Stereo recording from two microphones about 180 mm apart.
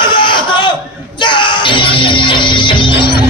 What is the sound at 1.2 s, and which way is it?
Music, 25° left (ahead or behind).